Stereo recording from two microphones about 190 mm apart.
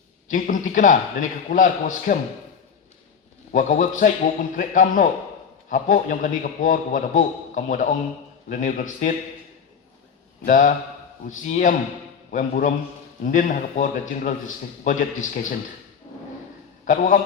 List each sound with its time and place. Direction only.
0.3 s a man's voice: 45° left (ahead or behind)
3.5 s a man's voice: 40° left (ahead or behind)
10.4 s a man's voice: 45° left (ahead or behind)
16.8 s a man's voice: 40° left (ahead or behind)